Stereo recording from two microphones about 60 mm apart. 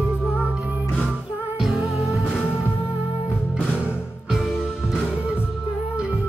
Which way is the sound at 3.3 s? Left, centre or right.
Left.